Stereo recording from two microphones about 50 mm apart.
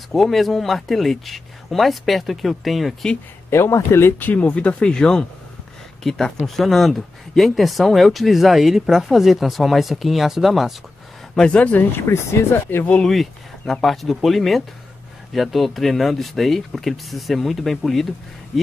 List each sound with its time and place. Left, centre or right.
0.1 s speech: centre
3.4 s speech: left
4.2 s speech: left
4.6 s speech: left; by 10.7 s centre
11.3 s speech: left
12.1 s speech: left
13.0 s speech: centre